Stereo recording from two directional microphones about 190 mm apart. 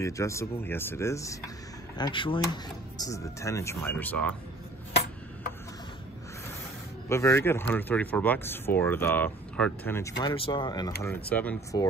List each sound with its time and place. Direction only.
0.0 s speech: 15° left (ahead or behind)
7.1 s speech: 15° left (ahead or behind)
10.2 s speech: 25° left (ahead or behind)
11.2 s speech: 10° left (ahead or behind)